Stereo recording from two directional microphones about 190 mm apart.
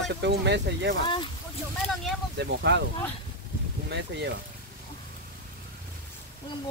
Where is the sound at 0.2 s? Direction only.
65° right (ahead or behind).